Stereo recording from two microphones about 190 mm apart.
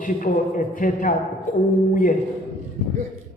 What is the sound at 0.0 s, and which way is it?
A man's voice, 45° left (ahead or behind).